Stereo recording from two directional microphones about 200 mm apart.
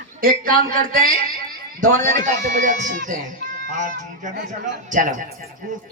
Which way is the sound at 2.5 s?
40° right (ahead or behind).